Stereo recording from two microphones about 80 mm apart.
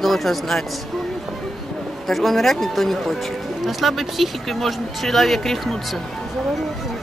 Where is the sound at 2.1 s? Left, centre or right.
Centre.